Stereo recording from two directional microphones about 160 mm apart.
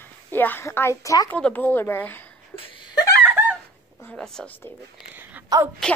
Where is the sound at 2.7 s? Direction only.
25° left (ahead or behind).